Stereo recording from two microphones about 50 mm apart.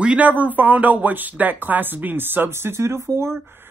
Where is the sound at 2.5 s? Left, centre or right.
Right.